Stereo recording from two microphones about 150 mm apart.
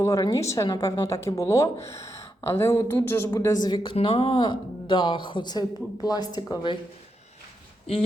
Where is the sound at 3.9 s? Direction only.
40° left (ahead or behind).